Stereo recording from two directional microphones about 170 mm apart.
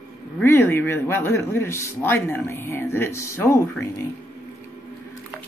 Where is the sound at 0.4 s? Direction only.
10° left (ahead or behind).